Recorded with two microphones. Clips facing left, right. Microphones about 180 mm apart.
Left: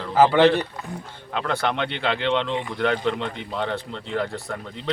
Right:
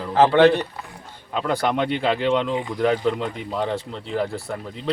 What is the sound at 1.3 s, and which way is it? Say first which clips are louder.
A man's voice: right 3 dB; 10° right (ahead or behind).